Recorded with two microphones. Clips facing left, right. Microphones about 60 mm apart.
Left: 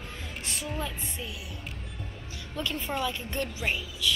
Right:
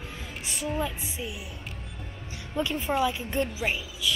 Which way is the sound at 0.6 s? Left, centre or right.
Centre.